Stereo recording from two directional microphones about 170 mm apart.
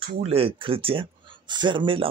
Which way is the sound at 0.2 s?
35° right (ahead or behind).